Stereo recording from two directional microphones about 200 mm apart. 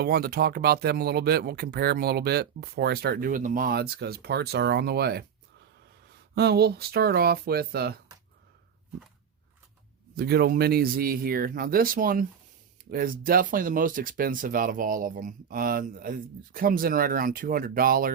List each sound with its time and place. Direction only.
0.0 s speech: 50° right (ahead or behind)
6.3 s speech: 55° right (ahead or behind)
10.2 s speech: 50° right (ahead or behind)